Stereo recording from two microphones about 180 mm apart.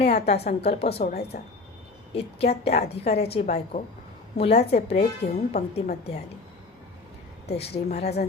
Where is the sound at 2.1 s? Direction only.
35° left (ahead or behind).